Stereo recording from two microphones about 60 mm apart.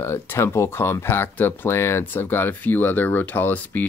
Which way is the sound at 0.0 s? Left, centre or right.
Left.